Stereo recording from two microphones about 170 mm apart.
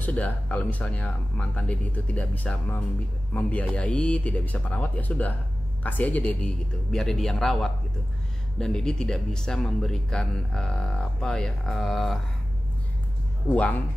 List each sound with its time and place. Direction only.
0.0 s speech: 10° left (ahead or behind)
13.5 s speech: 10° left (ahead or behind)